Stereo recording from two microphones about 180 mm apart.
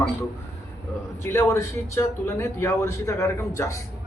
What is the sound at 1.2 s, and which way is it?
A man's voice, 15° left (ahead or behind).